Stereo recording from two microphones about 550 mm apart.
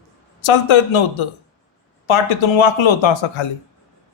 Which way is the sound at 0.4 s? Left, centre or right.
Left.